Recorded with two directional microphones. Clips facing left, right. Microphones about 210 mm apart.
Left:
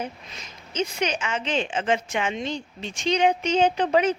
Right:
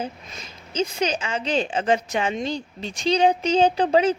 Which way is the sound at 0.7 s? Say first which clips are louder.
Right 2 dB; 30° right (ahead or behind).